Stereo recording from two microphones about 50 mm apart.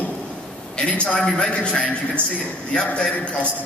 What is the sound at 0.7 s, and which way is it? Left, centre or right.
A man's voice, left.